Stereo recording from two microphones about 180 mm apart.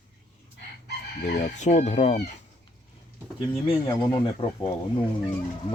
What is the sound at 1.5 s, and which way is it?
Speech, 40° left (ahead or behind).